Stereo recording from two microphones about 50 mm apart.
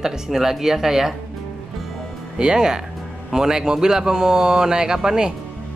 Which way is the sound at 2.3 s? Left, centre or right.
Centre.